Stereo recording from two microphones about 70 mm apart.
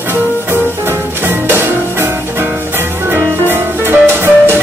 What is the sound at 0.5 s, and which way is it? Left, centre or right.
Music, right.